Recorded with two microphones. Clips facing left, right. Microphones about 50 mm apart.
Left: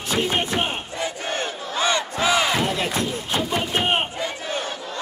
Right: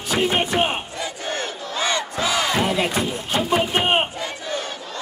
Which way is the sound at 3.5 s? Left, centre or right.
Centre.